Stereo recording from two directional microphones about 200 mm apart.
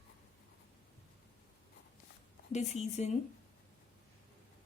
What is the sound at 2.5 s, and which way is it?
Speech, 35° left (ahead or behind).